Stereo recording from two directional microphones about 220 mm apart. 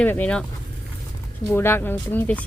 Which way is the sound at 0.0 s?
5° left (ahead or behind).